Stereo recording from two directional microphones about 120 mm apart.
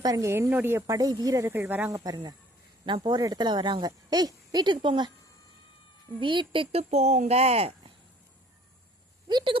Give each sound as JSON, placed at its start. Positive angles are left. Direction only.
{"t": 0.0, "sound": "speech", "side_deg": -30}
{"t": 0.9, "sound": "speech", "side_deg": -30}
{"t": 1.9, "sound": "speech", "side_deg": -30}
{"t": 6.1, "sound": "speech", "side_deg": -45}
{"t": 9.3, "sound": "speech", "side_deg": -45}